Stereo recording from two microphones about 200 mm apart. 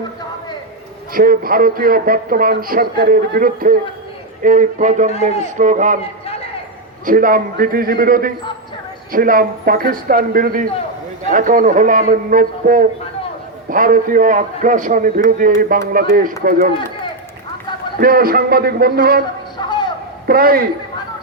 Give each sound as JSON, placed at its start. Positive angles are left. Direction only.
{"t": 1.1, "sound": "a man's voice", "side_deg": -45}
{"t": 6.0, "sound": "a sound", "side_deg": 30}
{"t": 7.0, "sound": "a man's voice", "side_deg": -45}
{"t": 18.0, "sound": "a man's voice", "side_deg": -45}
{"t": 19.5, "sound": "a sound", "side_deg": 20}
{"t": 20.2, "sound": "a man's voice", "side_deg": -50}